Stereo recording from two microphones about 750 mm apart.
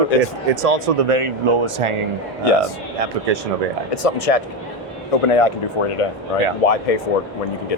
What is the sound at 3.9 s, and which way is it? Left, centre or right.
Speech, left.